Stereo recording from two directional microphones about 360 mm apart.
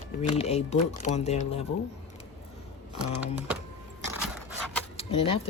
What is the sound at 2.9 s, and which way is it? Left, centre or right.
Speech, centre.